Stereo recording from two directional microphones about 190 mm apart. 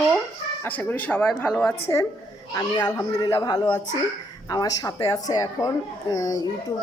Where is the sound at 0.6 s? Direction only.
10° left (ahead or behind).